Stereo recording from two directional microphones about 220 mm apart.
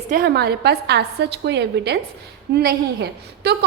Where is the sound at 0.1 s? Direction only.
45° right (ahead or behind).